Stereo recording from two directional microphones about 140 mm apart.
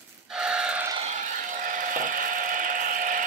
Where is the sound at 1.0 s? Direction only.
60° right (ahead or behind).